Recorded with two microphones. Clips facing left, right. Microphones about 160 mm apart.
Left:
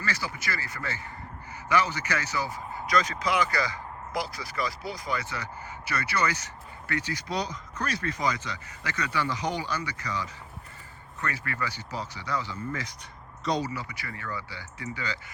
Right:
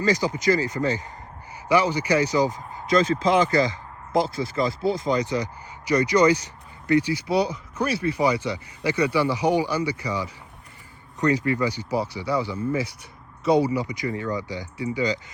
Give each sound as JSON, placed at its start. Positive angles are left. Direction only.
{"t": 0.0, "sound": "speech", "side_deg": -15}